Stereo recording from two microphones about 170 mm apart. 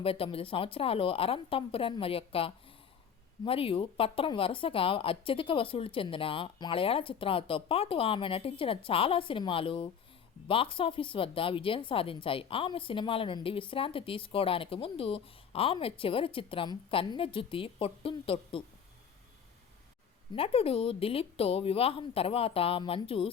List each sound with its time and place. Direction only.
0.0 s speech: 35° left (ahead or behind)
20.3 s speech: 35° left (ahead or behind)